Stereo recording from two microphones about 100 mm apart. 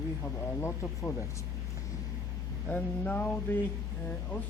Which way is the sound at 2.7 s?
15° left (ahead or behind).